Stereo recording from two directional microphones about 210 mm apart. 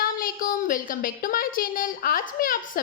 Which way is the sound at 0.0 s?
40° left (ahead or behind).